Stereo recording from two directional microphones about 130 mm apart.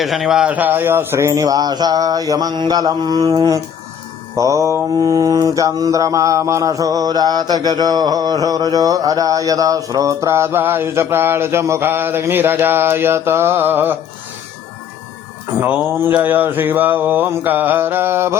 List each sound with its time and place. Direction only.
0.0 s mantra: centre (ahead or behind)
15.9 s mantra: 15° right (ahead or behind)